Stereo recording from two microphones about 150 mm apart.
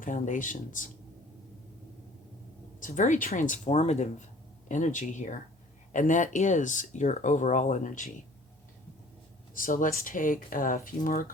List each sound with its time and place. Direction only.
0.0 s speech: 60° left (ahead or behind)
2.8 s speech: 55° left (ahead or behind)
9.6 s speech: 65° left (ahead or behind)